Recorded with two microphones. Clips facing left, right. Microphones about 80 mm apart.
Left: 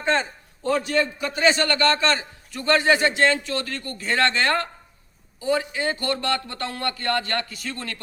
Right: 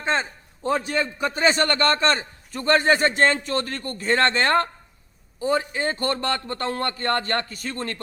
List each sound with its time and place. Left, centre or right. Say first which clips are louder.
0.0 s a man's voice: left 2 dB; right